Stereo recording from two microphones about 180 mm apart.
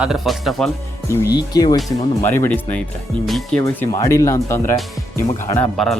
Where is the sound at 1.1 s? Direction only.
15° left (ahead or behind); by 3.6 s centre (ahead or behind).